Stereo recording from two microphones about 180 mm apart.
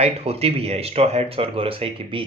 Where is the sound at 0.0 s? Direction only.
35° right (ahead or behind).